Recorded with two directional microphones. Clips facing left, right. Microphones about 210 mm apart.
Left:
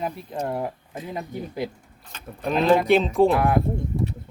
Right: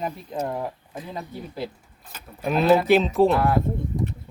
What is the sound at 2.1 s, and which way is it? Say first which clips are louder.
Speech: even; 10° right (ahead or behind).